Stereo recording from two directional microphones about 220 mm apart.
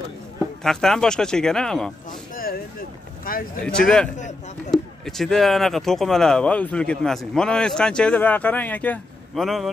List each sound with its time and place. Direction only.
0.4 s speech: centre (ahead or behind)
2.3 s a sound: 40° left (ahead or behind)
3.3 s speech: 40° left (ahead or behind)
3.6 s speech: 5° left (ahead or behind)